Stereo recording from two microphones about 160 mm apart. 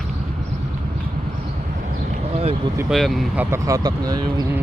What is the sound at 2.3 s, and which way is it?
Vehicle, 40° right (ahead or behind).